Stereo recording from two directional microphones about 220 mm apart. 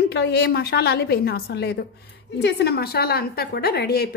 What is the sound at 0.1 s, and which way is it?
A woman's voice, 50° left (ahead or behind).